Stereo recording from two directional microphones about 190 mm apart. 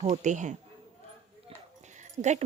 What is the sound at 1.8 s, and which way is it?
Dog, 40° right (ahead or behind).